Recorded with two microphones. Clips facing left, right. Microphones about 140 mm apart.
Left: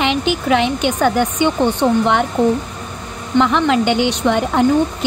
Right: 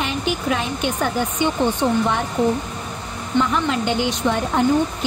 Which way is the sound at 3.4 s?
75° left (ahead or behind).